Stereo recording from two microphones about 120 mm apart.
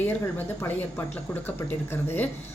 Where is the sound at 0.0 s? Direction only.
15° left (ahead or behind).